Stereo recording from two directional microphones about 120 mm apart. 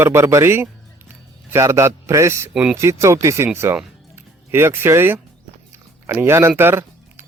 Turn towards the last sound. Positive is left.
turn(degrees=-20)  # may be behind; listen again after turning